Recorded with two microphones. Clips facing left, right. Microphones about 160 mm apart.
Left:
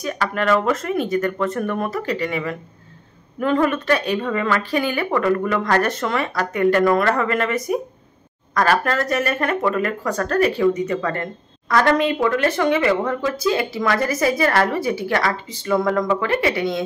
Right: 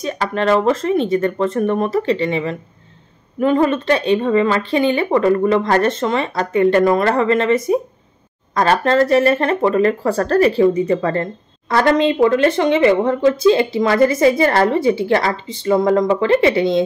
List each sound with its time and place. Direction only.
0.0 s speech: 25° right (ahead or behind)